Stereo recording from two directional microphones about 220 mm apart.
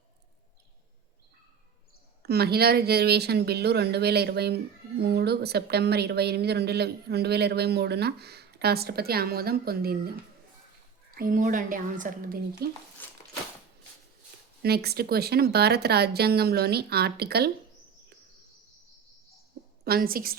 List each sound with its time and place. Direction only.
2.2 s speech: 45° right (ahead or behind)
11.1 s a woman's voice: 40° right (ahead or behind)
13.0 s a sound: 10° left (ahead or behind)
14.6 s speech: 45° right (ahead or behind)
19.8 s speech: 45° right (ahead or behind)